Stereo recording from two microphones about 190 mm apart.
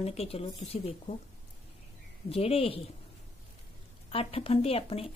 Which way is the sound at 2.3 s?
30° left (ahead or behind).